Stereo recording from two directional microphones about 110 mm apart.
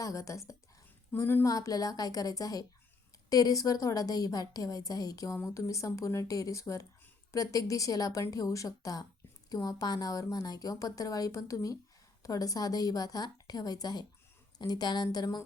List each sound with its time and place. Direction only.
0.0 s a woman's voice: 30° left (ahead or behind)
1.5 s a woman's voice: 35° left (ahead or behind)